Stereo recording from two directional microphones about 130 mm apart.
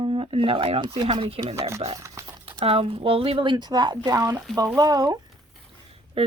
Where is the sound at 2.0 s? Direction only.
25° right (ahead or behind).